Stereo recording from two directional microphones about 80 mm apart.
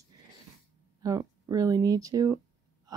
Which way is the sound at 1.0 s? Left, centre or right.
Right.